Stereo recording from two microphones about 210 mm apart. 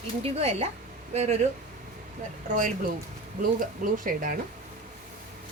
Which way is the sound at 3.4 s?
40° right (ahead or behind).